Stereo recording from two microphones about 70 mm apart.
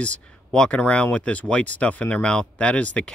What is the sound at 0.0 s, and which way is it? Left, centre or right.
Speech, centre.